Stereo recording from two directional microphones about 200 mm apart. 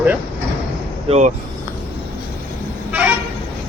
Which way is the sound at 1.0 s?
35° right (ahead or behind).